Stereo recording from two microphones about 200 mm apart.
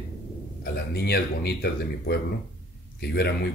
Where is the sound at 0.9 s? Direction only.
55° left (ahead or behind).